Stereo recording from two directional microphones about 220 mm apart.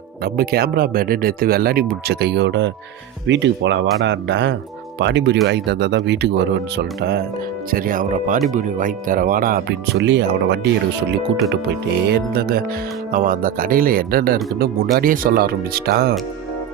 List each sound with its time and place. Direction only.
0.3 s speech: 45° right (ahead or behind)
12.0 s speech: 45° right (ahead or behind)